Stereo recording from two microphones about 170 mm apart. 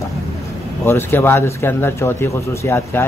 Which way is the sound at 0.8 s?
15° left (ahead or behind).